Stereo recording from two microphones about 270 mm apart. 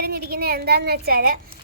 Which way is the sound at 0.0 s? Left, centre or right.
Right.